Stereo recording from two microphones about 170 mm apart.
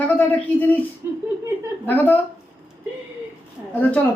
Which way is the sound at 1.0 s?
15° right (ahead or behind).